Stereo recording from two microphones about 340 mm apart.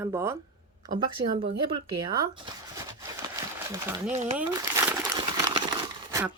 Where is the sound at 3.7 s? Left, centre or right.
Centre.